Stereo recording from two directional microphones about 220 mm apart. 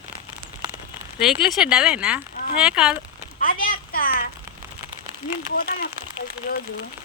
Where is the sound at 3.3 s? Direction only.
40° left (ahead or behind).